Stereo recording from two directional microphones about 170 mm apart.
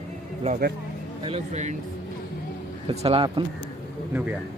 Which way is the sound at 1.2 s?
40° right (ahead or behind).